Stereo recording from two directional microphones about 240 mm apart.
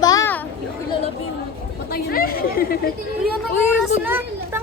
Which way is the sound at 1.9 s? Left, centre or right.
Left.